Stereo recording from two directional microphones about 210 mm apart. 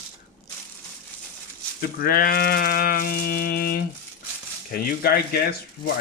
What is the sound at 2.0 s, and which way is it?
Rattle, 45° left (ahead or behind).